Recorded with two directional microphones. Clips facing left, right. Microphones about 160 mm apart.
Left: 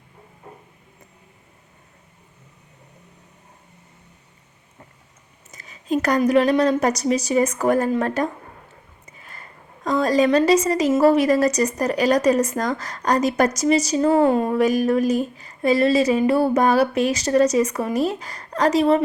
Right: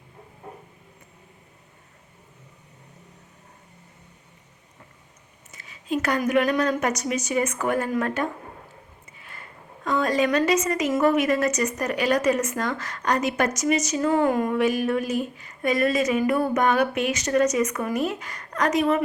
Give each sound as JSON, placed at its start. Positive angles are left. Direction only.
{"t": 5.5, "sound": "a woman's voice", "side_deg": 40}